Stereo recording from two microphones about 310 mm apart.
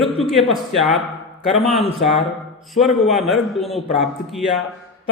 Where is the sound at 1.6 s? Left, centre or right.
Centre.